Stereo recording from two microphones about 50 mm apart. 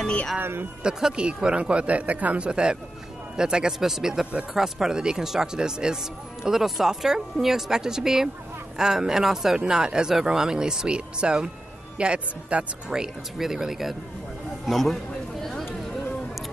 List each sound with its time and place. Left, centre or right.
0.0 s music: left
0.4 s a man's voice: right
0.8 s speech: centre
12.9 s a man's voice: centre